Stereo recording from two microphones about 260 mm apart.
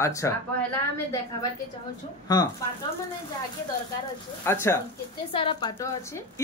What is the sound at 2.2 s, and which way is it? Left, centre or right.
Speech, centre.